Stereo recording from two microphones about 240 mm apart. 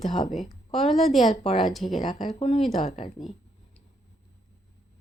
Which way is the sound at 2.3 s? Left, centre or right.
Left.